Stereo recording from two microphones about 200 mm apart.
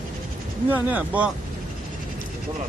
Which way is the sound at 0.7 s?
10° right (ahead or behind).